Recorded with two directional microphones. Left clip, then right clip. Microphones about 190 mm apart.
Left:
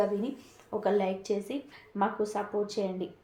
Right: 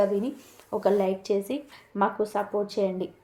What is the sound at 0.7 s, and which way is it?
A woman's voice, 40° right (ahead or behind).